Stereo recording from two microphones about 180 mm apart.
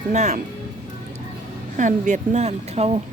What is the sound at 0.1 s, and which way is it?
Speech, 40° right (ahead or behind).